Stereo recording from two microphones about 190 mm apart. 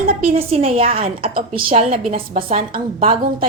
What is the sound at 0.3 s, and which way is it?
A woman's voice, 35° right (ahead or behind).